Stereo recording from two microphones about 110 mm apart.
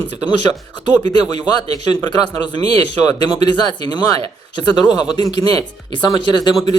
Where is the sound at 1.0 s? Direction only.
40° left (ahead or behind).